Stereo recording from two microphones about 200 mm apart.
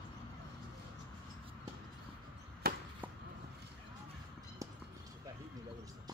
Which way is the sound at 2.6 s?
55° right (ahead or behind).